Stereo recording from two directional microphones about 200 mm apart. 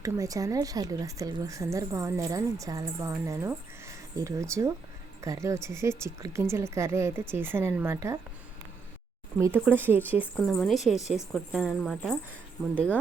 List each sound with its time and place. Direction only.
0.0 s a woman's voice: 15° right (ahead or behind)
9.4 s a woman's voice: 10° right (ahead or behind); by 13.0 s 10° left (ahead or behind)